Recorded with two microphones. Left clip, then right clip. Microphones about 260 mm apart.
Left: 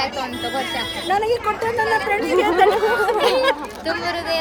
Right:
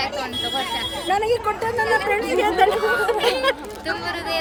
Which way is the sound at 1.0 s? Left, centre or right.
Centre.